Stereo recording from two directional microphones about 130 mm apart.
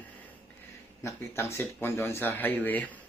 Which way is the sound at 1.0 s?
20° left (ahead or behind).